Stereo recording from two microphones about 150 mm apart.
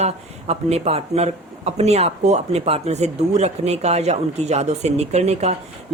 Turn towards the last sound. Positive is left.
turn(degrees=-45)  # may be behind; listen again after turning